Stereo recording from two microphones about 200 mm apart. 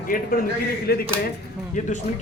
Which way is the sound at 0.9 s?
50° left (ahead or behind).